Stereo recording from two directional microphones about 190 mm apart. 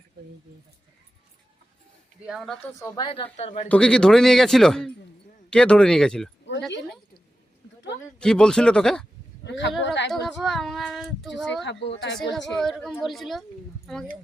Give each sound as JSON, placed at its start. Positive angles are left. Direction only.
{"t": 2.2, "sound": "speech", "side_deg": 0}
{"t": 2.7, "sound": "a woman's voice", "side_deg": 20}
{"t": 3.7, "sound": "speech", "side_deg": 5}
{"t": 8.2, "sound": "speech", "side_deg": 5}
{"t": 9.4, "sound": "a sound", "side_deg": 65}
{"t": 10.1, "sound": "speech", "side_deg": 0}
{"t": 11.6, "sound": "speech", "side_deg": 65}
{"t": 12.5, "sound": "speech", "side_deg": 0}